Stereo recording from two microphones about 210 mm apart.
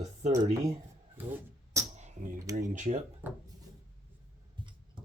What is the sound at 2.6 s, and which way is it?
Speech, 35° right (ahead or behind).